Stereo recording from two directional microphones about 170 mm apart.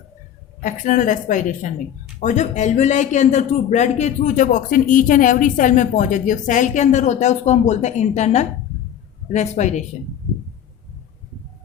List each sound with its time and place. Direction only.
0.6 s speech: 50° left (ahead or behind)